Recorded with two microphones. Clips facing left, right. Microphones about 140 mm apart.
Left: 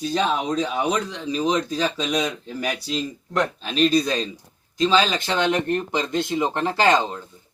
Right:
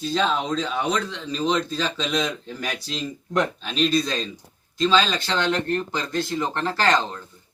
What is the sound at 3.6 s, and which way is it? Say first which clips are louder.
Speech: left 3 dB; 40° left (ahead or behind).